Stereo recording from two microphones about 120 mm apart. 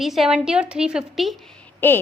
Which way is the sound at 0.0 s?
Centre (ahead or behind).